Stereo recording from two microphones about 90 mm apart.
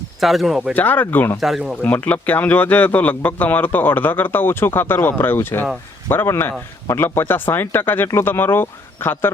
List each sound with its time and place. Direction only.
0.2 s speech: centre (ahead or behind)
0.7 s speech: 20° left (ahead or behind)
1.4 s speech: 5° right (ahead or behind)
1.8 s speech: 20° left (ahead or behind)